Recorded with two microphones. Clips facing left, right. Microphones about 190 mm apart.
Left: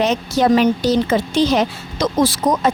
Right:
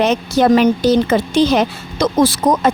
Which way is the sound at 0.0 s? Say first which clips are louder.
Right 3 dB; 60° right (ahead or behind).